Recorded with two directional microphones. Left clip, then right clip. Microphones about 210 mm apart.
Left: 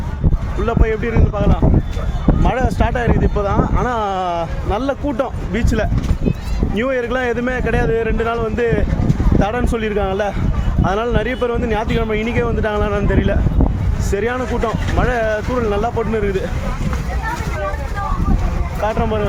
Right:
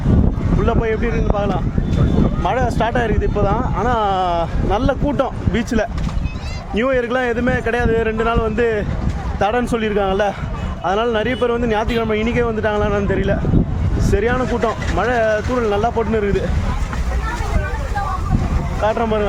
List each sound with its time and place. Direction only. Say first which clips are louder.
0.6 s speech: even; 10° right (ahead or behind)
18.8 s speech: right 2 dB; 15° right (ahead or behind)